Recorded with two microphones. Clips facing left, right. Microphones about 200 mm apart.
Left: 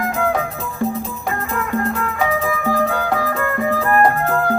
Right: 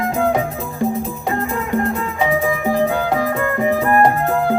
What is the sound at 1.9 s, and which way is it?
Music, 25° right (ahead or behind).